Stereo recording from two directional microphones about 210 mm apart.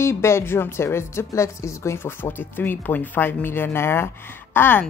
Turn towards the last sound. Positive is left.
turn(degrees=10)  # may be behind; listen again after turning